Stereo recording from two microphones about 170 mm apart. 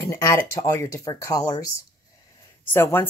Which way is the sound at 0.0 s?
15° left (ahead or behind).